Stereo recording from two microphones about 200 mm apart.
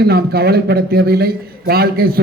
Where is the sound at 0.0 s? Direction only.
50° right (ahead or behind).